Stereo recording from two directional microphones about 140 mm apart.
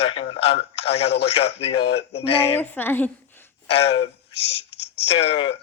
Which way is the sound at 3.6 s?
45° left (ahead or behind).